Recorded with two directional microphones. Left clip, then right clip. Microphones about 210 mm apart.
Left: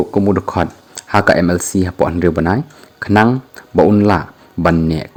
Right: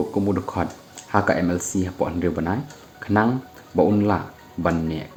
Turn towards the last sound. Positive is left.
turn(degrees=50)  # may be behind; listen again after turning